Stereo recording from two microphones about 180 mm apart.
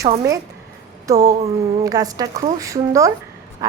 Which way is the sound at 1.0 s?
20° right (ahead or behind).